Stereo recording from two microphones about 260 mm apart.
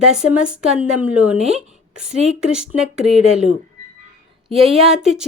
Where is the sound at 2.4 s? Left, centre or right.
Centre.